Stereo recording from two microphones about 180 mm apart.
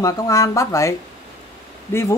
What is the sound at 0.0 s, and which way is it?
Speech, 15° left (ahead or behind).